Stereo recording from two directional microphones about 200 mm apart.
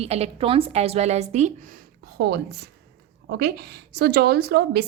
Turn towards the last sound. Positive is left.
turn(degrees=-55)  # may be behind; listen again after turning